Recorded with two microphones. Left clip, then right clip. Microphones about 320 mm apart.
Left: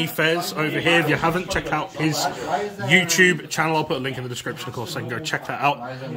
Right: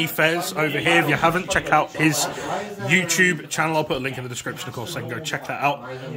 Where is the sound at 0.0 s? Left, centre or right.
Centre.